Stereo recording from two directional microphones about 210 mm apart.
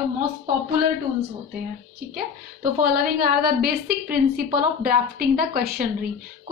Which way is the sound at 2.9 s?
45° right (ahead or behind).